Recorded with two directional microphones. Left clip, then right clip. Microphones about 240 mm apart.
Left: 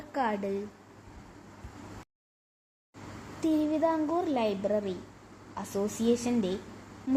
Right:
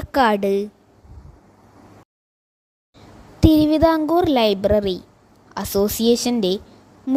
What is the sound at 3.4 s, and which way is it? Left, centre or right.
A woman's voice, right.